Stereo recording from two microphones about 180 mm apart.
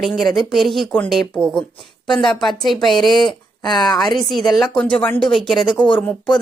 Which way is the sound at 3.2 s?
25° left (ahead or behind).